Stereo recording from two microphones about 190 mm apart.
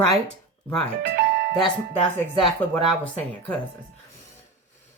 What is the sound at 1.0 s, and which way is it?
Music, 55° right (ahead or behind).